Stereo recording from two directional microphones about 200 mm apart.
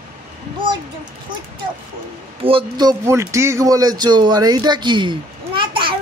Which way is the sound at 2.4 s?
25° right (ahead or behind).